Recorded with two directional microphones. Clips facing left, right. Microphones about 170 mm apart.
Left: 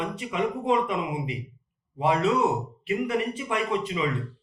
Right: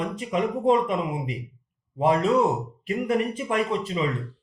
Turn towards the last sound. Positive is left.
turn(degrees=-40)  # may be behind; listen again after turning